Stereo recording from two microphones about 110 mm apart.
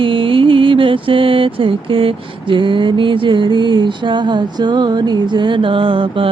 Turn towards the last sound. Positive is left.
turn(degrees=-50)  # may be behind; listen again after turning